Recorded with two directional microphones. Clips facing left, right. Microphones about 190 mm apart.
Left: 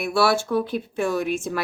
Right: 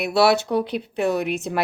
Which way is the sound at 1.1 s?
65° right (ahead or behind).